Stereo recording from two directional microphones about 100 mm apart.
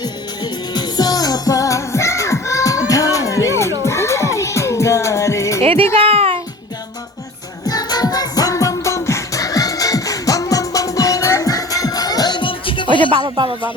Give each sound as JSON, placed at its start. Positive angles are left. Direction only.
{"t": 0.0, "sound": "music", "side_deg": 45}
{"t": 6.0, "sound": "music", "side_deg": -80}
{"t": 7.7, "sound": "music", "side_deg": 40}
{"t": 13.1, "sound": "speech", "side_deg": -55}